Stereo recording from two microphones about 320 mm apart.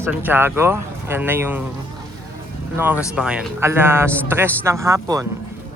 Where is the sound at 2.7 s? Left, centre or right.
Centre.